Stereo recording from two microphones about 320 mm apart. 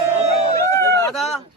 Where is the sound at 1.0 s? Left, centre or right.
Centre.